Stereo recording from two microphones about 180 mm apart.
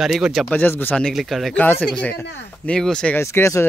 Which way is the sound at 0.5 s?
10° left (ahead or behind).